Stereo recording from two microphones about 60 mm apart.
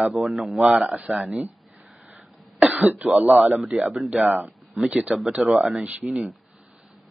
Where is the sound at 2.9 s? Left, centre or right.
Right.